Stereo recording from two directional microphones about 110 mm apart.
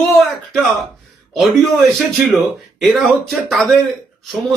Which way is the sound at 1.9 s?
Centre (ahead or behind).